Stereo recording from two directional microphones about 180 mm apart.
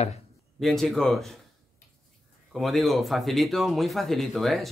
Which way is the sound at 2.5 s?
Centre (ahead or behind).